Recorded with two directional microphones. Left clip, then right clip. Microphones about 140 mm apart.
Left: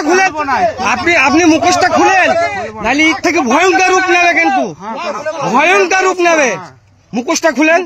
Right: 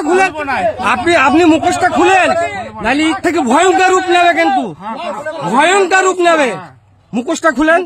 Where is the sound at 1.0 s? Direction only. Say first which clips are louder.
Even; 20° right (ahead or behind).